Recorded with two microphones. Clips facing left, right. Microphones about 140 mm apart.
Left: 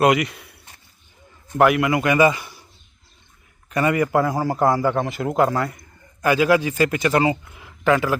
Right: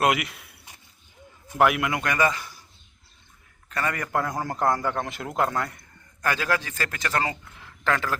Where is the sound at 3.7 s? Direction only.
10° left (ahead or behind).